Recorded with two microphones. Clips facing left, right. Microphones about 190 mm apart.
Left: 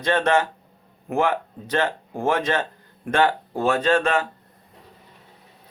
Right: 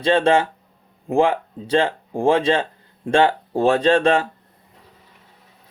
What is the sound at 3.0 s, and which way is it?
Speech, 25° right (ahead or behind).